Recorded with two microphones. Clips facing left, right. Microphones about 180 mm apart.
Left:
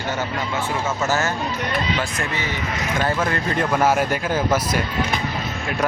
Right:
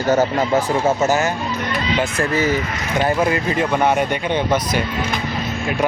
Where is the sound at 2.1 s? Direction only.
40° right (ahead or behind).